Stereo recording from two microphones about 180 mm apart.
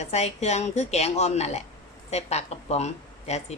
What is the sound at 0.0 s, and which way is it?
Speech, 40° left (ahead or behind).